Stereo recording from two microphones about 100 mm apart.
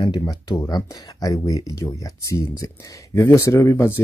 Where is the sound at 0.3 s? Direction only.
40° left (ahead or behind).